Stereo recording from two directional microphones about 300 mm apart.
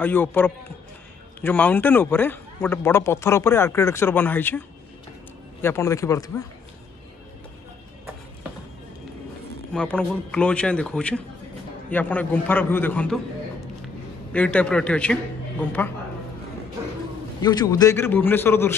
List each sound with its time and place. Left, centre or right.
0.0 s a man's voice: centre
9.7 s a man's voice: centre
14.3 s a man's voice: centre
17.4 s speech: centre